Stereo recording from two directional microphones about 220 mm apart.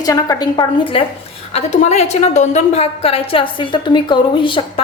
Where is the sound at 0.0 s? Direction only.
15° left (ahead or behind).